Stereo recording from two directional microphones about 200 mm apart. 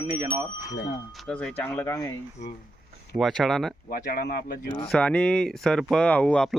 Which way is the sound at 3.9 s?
45° left (ahead or behind).